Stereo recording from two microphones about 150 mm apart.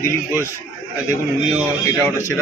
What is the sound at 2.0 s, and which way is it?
Speech, 20° left (ahead or behind).